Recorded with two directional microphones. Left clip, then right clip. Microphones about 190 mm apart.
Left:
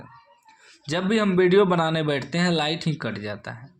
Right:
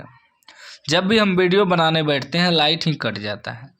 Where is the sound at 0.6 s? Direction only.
30° right (ahead or behind).